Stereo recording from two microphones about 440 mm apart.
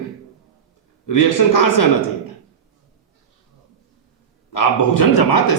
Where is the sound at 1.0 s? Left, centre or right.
Left.